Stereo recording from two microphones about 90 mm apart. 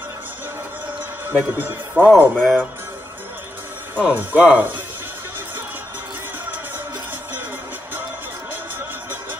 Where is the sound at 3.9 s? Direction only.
20° right (ahead or behind).